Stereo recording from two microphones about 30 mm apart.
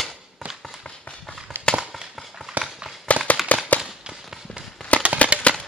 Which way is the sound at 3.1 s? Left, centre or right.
Left.